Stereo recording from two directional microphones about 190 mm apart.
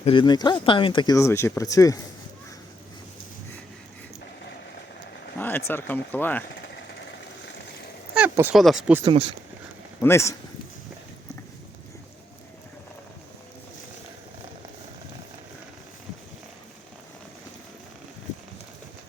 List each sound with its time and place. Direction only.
0.0 s speech: 25° left (ahead or behind)
5.4 s speech: 10° left (ahead or behind)
8.1 s speech: 10° right (ahead or behind)
9.0 s speech: 30° right (ahead or behind)
10.0 s speech: 15° left (ahead or behind)